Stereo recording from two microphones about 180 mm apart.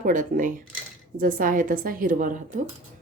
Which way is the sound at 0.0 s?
45° right (ahead or behind).